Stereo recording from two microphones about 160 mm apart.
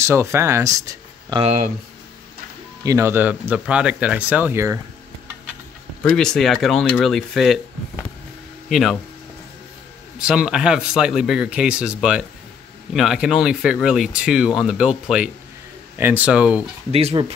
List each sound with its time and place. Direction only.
0.0 s speech: 15° right (ahead or behind)
1.4 s speech: 40° right (ahead or behind)
2.8 s speech: 20° right (ahead or behind)
6.1 s speech: centre (ahead or behind)
8.6 s speech: centre (ahead or behind)
10.1 s speech: 5° right (ahead or behind)
16.9 s speech: 35° right (ahead or behind)